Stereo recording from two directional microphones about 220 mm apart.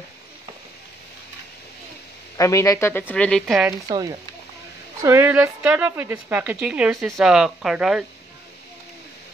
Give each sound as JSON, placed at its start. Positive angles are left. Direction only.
{"t": 2.3, "sound": "a woman's voice", "side_deg": 15}
{"t": 3.8, "sound": "a woman's voice", "side_deg": -15}